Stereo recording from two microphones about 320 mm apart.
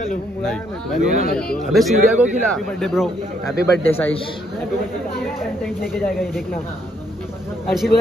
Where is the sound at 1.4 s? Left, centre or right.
Centre.